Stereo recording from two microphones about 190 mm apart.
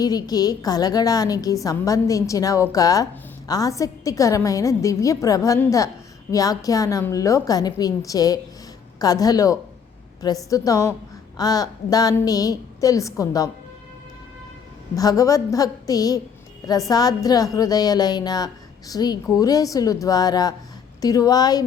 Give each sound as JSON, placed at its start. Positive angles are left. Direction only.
{"t": 0.0, "sound": "a woman's voice", "side_deg": 20}
{"t": 14.9, "sound": "speech", "side_deg": 20}